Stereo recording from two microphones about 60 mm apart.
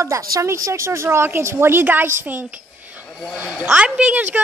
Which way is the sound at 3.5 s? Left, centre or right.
Centre.